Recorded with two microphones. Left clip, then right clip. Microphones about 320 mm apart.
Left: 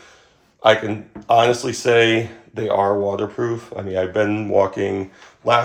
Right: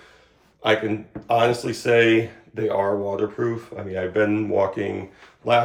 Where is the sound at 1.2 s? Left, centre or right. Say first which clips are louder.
Left 5 dB; left.